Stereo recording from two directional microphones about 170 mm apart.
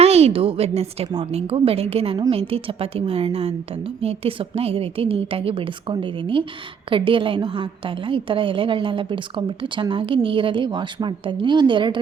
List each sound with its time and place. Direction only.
0.0 s a woman's voice: 40° right (ahead or behind)